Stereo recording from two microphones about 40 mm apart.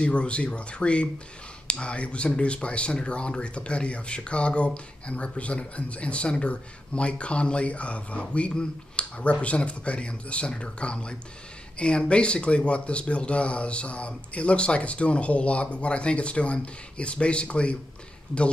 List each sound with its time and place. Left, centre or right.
0.0 s speech: left